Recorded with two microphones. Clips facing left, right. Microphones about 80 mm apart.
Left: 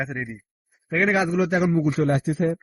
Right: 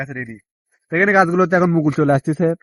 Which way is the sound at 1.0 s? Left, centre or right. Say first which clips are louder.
Right 7 dB; right.